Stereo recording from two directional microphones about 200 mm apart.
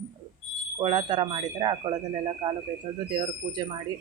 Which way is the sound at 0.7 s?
25° right (ahead or behind).